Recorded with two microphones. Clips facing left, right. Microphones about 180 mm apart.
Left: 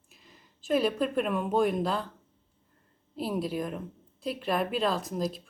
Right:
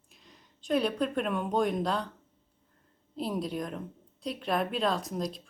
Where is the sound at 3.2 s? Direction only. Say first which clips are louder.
Left 2 dB; 5° left (ahead or behind).